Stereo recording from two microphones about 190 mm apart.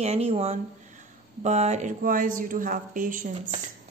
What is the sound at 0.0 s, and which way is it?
Speech, 35° right (ahead or behind).